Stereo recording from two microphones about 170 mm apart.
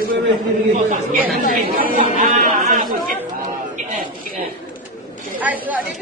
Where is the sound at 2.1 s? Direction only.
45° right (ahead or behind).